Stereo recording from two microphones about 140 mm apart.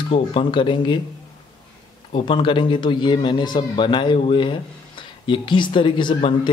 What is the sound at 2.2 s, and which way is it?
Speech, 35° left (ahead or behind).